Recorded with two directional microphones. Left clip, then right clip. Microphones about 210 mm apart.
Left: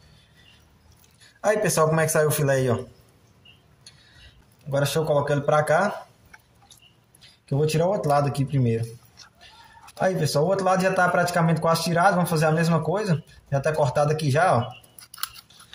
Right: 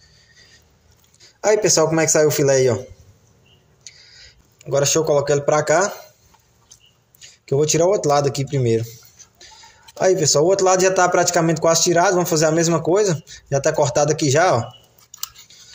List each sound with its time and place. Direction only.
1.4 s speech: 20° right (ahead or behind)
4.6 s a man's voice: 35° right (ahead or behind)
7.4 s a man's voice: 35° right (ahead or behind)
9.9 s a man's voice: 30° right (ahead or behind)